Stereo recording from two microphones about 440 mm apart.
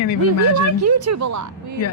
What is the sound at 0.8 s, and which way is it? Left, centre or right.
Speech, right.